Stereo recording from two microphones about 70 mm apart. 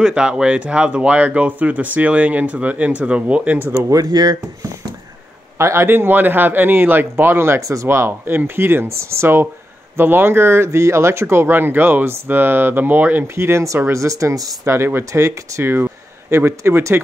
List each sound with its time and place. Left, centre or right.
0.0 s speech: centre; by 3.8 s right
3.9 s speech: right
5.6 s speech: right